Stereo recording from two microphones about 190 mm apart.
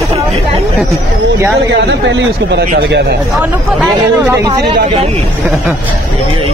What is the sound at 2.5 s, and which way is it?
Speech, 65° right (ahead or behind).